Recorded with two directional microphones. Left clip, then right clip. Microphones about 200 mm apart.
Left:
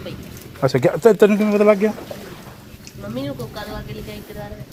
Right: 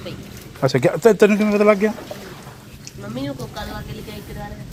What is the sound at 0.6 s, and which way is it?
Speech, centre (ahead or behind).